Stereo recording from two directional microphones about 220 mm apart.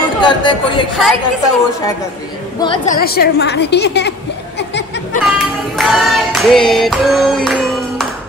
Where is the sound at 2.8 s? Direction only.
45° left (ahead or behind).